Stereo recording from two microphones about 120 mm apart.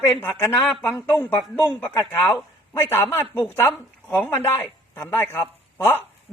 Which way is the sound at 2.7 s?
20° left (ahead or behind).